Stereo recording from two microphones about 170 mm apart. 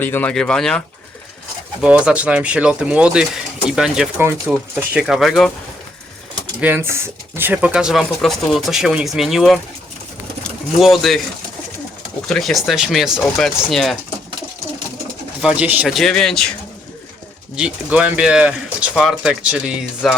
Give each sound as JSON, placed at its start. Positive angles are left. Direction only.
{"t": 0.0, "sound": "speech", "side_deg": 10}
{"t": 1.8, "sound": "speech", "side_deg": -5}
{"t": 4.2, "sound": "speech", "side_deg": -15}
{"t": 6.6, "sound": "speech", "side_deg": -10}
{"t": 10.8, "sound": "speech", "side_deg": 0}
{"t": 12.3, "sound": "speech", "side_deg": 0}
{"t": 15.4, "sound": "speech", "side_deg": -5}
{"t": 17.6, "sound": "speech", "side_deg": -5}